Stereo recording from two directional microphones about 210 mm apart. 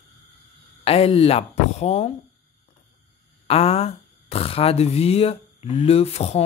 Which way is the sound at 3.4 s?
30° left (ahead or behind).